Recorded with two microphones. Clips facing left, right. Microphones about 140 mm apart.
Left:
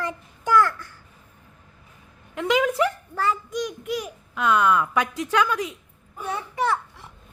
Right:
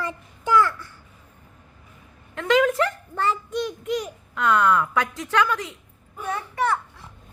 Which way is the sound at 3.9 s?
10° left (ahead or behind).